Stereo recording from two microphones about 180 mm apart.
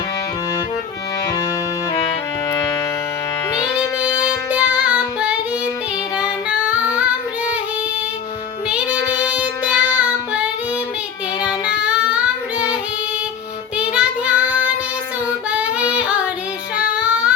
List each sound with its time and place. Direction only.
2.5 s music: 15° left (ahead or behind)
3.6 s child singing: 5° right (ahead or behind)
6.1 s music: 5° right (ahead or behind)
8.7 s child singing: 5° right (ahead or behind)
11.9 s child singing: 5° right (ahead or behind)
13.7 s child singing: 5° right (ahead or behind)
15.4 s female singing: 5° right (ahead or behind)
16.9 s child singing: 5° right (ahead or behind)